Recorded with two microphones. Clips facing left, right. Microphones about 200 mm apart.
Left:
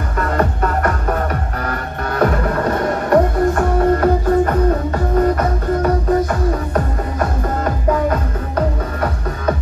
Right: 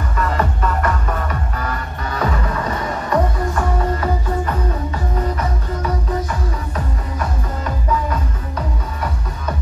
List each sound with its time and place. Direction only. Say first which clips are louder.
0.2 s music: left 3 dB; 55° left (ahead or behind)